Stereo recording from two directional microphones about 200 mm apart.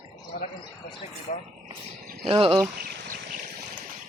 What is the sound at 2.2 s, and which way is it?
Speech, 25° right (ahead or behind).